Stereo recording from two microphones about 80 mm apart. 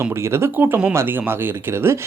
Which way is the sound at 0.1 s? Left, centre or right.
Right.